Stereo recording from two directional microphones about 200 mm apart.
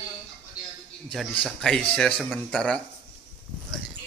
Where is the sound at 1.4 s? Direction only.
Centre (ahead or behind).